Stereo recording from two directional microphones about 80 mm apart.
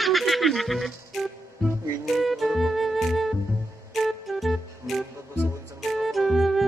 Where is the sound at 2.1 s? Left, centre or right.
Centre.